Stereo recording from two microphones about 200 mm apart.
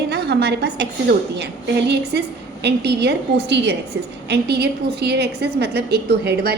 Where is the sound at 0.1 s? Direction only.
55° right (ahead or behind).